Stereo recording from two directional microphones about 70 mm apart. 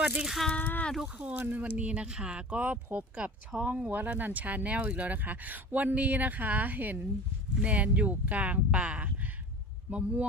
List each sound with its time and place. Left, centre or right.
0.5 s speech: left
1.0 s speech: right